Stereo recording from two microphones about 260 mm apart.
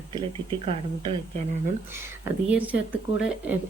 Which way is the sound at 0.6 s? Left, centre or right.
Right.